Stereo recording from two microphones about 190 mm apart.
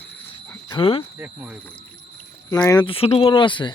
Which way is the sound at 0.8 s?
30° left (ahead or behind).